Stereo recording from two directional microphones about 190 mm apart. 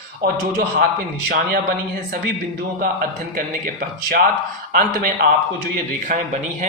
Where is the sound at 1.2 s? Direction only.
50° right (ahead or behind).